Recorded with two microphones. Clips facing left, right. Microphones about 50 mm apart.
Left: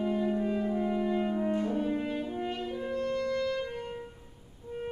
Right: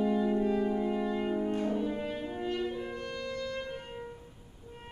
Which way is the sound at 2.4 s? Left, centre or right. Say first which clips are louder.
Right 1 dB; centre.